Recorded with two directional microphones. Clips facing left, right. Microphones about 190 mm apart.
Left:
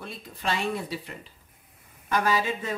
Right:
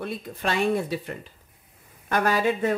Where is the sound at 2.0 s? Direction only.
55° right (ahead or behind).